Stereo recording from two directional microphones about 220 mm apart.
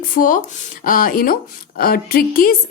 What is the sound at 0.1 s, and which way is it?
A woman's voice, 40° left (ahead or behind).